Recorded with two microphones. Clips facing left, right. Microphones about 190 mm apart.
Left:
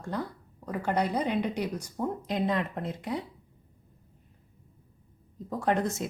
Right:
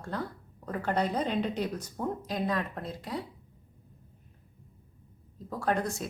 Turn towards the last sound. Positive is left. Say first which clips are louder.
# left 2 dB
turn(degrees=20)  # may be behind; listen again after turning